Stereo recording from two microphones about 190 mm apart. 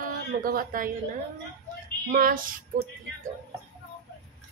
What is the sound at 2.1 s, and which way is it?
Speech, 45° right (ahead or behind).